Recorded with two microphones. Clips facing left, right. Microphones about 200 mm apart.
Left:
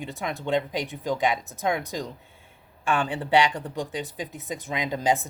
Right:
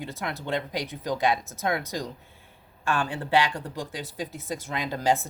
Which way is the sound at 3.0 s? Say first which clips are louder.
Left 2 dB; 20° left (ahead or behind).